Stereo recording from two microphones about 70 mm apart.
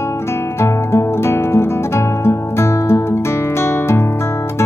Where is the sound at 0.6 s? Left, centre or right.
Left.